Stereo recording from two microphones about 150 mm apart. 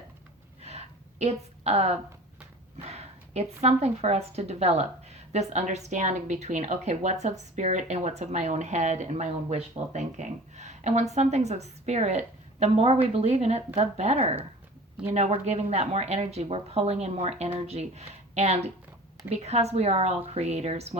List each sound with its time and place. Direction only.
0.6 s gasp: 45° right (ahead or behind)
2.8 s a woman's voice: 45° right (ahead or behind)